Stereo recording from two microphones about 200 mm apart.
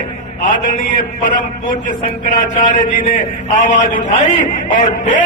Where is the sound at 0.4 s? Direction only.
40° left (ahead or behind).